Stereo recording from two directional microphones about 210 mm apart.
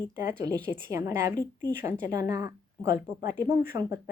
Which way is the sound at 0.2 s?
10° right (ahead or behind).